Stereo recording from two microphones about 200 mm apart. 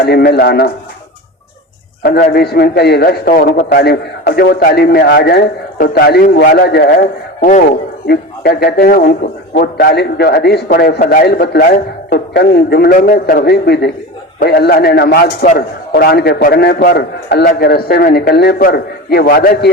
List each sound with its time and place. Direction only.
0.0 s a man's voice: 50° left (ahead or behind)
2.3 s a man's voice: 50° left (ahead or behind)
7.0 s a man's voice: 35° left (ahead or behind)
8.0 s a man's voice: 55° left (ahead or behind)